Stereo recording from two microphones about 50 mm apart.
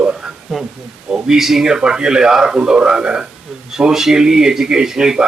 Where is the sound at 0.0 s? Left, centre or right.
Centre.